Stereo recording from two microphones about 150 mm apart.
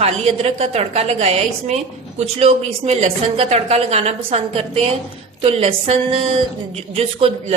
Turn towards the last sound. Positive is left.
turn(degrees=-40)  # may be behind; listen again after turning